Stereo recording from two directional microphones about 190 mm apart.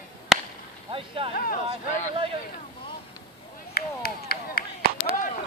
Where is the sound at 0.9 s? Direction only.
30° right (ahead or behind).